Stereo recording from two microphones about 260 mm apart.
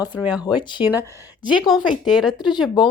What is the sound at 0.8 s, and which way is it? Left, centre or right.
Speech, centre.